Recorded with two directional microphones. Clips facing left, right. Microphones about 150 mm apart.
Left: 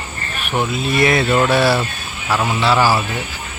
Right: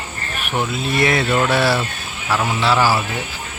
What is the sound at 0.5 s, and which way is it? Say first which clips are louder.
Speech: left 2 dB; 10° left (ahead or behind).